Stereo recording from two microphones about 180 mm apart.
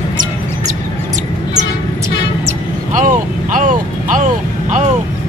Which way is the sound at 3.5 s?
45° right (ahead or behind).